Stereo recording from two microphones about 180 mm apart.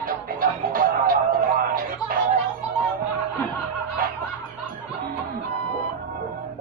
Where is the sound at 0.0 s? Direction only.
50° right (ahead or behind).